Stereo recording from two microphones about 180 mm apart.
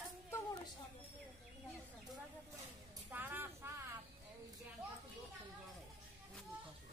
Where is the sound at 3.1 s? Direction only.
10° right (ahead or behind).